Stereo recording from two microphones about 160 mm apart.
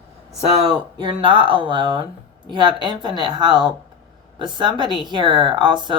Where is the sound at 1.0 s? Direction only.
30° right (ahead or behind).